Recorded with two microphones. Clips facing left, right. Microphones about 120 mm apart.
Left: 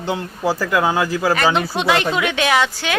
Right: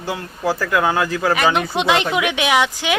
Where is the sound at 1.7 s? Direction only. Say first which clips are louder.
Even; 20° right (ahead or behind).